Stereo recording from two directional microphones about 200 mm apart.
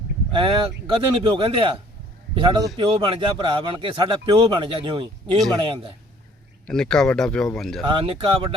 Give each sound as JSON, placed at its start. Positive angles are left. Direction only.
{"t": 0.3, "sound": "speech", "side_deg": -25}
{"t": 6.7, "sound": "speech", "side_deg": 5}
{"t": 7.9, "sound": "speech", "side_deg": -25}